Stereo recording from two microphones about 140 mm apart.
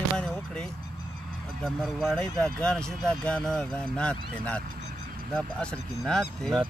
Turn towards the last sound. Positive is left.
turn(degrees=5)  # may be behind; listen again after turning